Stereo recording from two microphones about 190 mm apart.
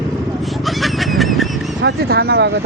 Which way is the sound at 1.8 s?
60° right (ahead or behind).